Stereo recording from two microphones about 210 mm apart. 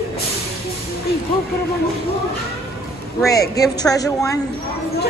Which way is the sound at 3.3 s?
15° left (ahead or behind).